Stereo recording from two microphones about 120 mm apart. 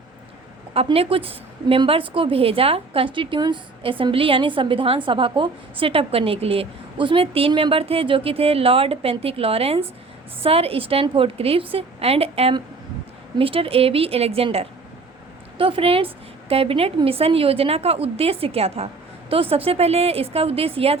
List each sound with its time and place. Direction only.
0.9 s a woman's voice: 50° right (ahead or behind)